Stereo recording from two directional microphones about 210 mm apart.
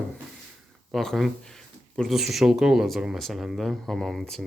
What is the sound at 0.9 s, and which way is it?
Speech, centre (ahead or behind).